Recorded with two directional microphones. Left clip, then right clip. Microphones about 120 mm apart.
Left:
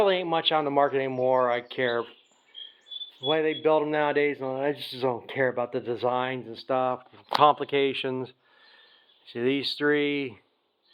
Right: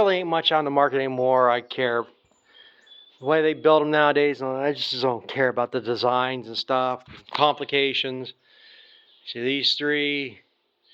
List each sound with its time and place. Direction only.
0.0 s speech: 50° right (ahead or behind)
1.7 s speech: 30° right (ahead or behind)
3.2 s speech: 90° right
4.2 s speech: 40° right (ahead or behind)
6.1 s speech: 35° right (ahead or behind)
6.4 s speech: 25° right (ahead or behind); by 10.4 s 10° left (ahead or behind)